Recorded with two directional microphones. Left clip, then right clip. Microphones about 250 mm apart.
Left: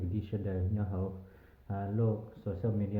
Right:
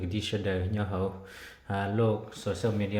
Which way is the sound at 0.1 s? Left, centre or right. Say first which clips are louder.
Right 10 dB; centre.